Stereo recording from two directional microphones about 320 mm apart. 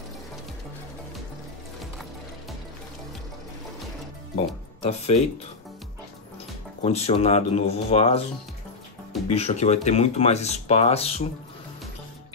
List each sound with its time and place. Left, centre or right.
4.8 s speech: centre
6.8 s speech: centre
9.3 s speech: centre